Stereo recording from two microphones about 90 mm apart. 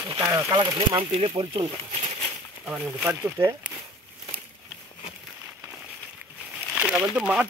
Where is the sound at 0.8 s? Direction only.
75° right (ahead or behind).